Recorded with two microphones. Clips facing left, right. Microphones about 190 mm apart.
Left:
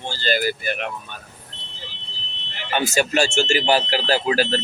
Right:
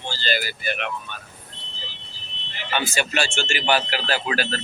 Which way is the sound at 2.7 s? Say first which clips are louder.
Left 5 dB; 45° left (ahead or behind).